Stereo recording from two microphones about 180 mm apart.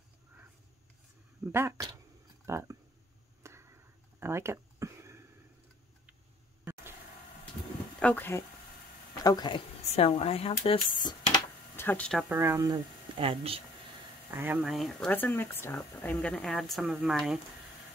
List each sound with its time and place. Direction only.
1.4 s speech: 15° right (ahead or behind)
3.4 s a sound: 15° right (ahead or behind)
6.6 s a sound: 15° right (ahead or behind)
8.0 s speech: 10° left (ahead or behind)
9.2 s speech: 20° left (ahead or behind)
9.9 s speech: 35° left (ahead or behind)
11.1 s a sound: 25° left (ahead or behind)
11.7 s speech: 10° left (ahead or behind)
12.4 s speech: 15° right (ahead or behind)
13.2 s speech: 30° right (ahead or behind)
14.3 s speech: 10° right (ahead or behind)
14.6 s speech: centre (ahead or behind)